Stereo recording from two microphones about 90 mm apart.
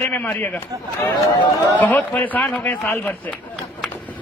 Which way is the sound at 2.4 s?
5° left (ahead or behind).